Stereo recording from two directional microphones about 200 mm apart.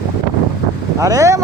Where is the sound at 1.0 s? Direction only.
15° right (ahead or behind).